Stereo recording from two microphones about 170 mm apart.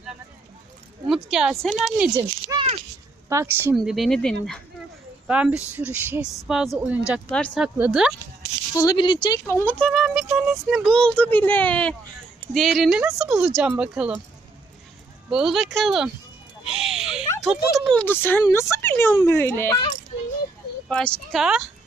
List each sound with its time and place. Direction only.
1.0 s speech: centre (ahead or behind)
2.1 s speech: 20° right (ahead or behind)
3.8 s a woman's voice: centre (ahead or behind)
5.3 s speech: 5° right (ahead or behind)
7.3 s speech: 10° left (ahead or behind)
7.5 s a woman's voice: 5° right (ahead or behind)
8.8 s speech: 25° left (ahead or behind)
9.5 s a woman's voice: 15° left (ahead or behind); by 14.2 s 5° right (ahead or behind)
15.3 s a woman's voice: 5° right (ahead or behind)
16.7 s a sound: 5° right (ahead or behind)
17.5 s speech: centre (ahead or behind)
20.8 s a woman's voice: centre (ahead or behind)